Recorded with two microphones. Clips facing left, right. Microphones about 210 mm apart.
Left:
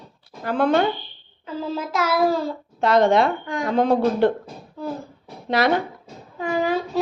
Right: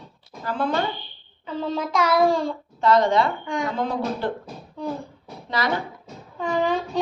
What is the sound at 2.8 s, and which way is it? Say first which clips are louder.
Speech: left 2 dB; 70° left (ahead or behind).